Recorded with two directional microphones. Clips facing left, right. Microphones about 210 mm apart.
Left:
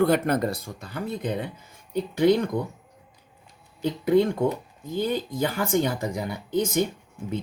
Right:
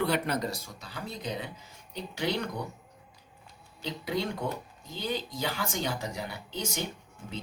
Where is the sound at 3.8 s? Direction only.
50° left (ahead or behind).